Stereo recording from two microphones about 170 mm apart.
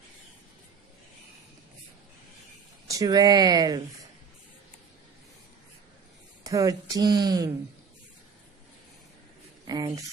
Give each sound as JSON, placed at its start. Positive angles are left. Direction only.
{"t": 2.9, "sound": "speech", "side_deg": -20}
{"t": 6.4, "sound": "speech", "side_deg": -20}
{"t": 9.7, "sound": "a sound", "side_deg": -20}